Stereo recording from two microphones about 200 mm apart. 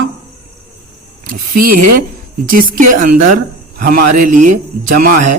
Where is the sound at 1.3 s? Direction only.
45° right (ahead or behind).